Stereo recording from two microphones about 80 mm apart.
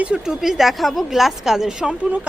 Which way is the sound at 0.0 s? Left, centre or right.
Centre.